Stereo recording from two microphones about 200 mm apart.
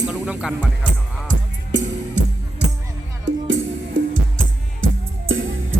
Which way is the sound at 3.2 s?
70° right (ahead or behind).